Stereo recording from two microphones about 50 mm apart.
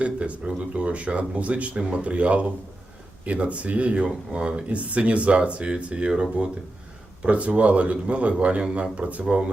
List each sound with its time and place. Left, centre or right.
0.0 s speech: right